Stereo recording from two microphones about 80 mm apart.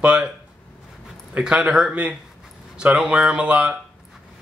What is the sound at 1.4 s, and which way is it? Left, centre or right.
Speech, centre.